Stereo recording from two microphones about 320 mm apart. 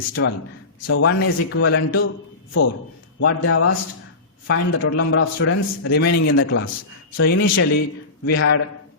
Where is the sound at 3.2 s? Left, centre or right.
Left.